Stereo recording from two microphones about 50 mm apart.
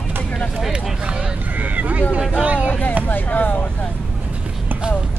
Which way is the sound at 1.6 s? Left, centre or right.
Right.